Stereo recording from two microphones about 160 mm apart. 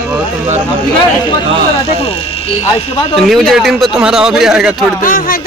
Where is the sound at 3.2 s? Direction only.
Centre (ahead or behind).